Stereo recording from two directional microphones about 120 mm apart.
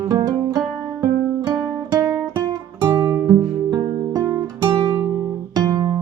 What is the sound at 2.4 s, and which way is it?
Music, 35° right (ahead or behind).